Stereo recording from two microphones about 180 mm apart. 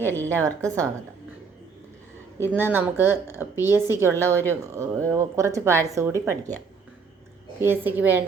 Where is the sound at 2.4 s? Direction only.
10° right (ahead or behind).